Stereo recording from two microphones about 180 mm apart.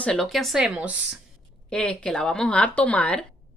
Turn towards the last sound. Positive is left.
turn(degrees=5)  # may be behind; listen again after turning